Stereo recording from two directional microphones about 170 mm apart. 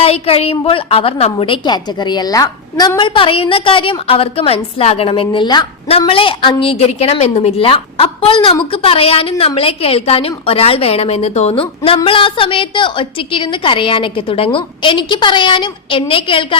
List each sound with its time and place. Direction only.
0.0 s a woman's voice: 35° left (ahead or behind)